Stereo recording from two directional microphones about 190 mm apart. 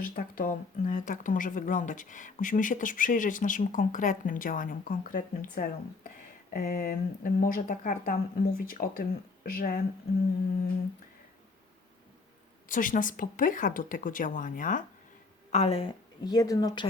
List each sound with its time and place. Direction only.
0.0 s speech: 45° left (ahead or behind)
12.6 s a woman's voice: 45° left (ahead or behind); by 16.9 s 20° left (ahead or behind)